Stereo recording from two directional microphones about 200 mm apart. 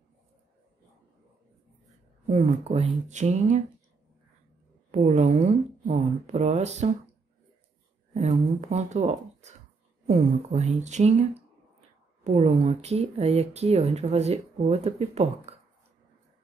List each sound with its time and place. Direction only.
2.2 s speech: 25° right (ahead or behind)
4.9 s speech: 40° right (ahead or behind)
8.1 s speech: 35° right (ahead or behind)